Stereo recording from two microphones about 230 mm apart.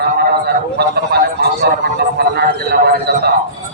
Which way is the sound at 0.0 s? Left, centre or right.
Right.